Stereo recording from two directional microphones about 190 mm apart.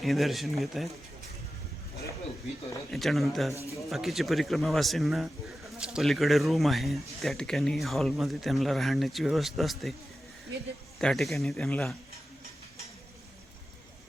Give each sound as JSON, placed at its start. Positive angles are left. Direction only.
{"t": 0.0, "sound": "speech", "side_deg": 0}
{"t": 2.9, "sound": "speech", "side_deg": 0}
{"t": 3.5, "sound": "speech", "side_deg": 15}
{"t": 3.8, "sound": "speech", "side_deg": 0}
{"t": 11.0, "sound": "speech", "side_deg": 0}